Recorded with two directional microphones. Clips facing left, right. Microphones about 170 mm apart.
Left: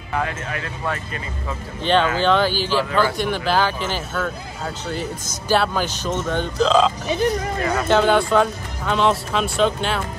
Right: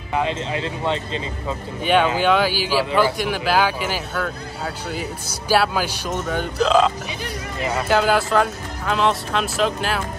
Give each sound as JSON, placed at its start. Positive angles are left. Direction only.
{"t": 0.1, "sound": "speech", "side_deg": -20}
{"t": 1.8, "sound": "speech", "side_deg": -10}